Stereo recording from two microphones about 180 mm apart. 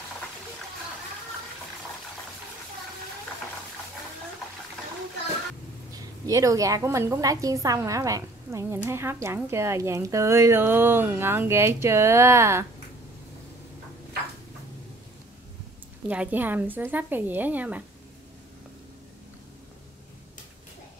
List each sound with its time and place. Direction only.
6.2 s a woman's voice: 20° right (ahead or behind)
16.1 s a woman's voice: 10° right (ahead or behind)